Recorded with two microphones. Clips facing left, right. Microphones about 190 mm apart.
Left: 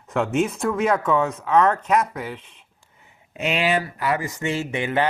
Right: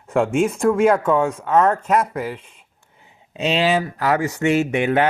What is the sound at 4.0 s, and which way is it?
Speech, 85° right.